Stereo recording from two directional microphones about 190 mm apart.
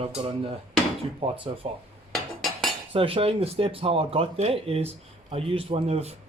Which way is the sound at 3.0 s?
30° right (ahead or behind).